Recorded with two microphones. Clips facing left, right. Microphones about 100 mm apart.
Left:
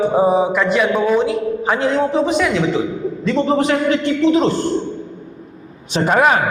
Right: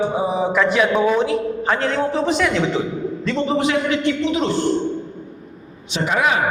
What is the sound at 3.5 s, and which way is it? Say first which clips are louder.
A man's voice: left 3 dB; 40° left (ahead or behind).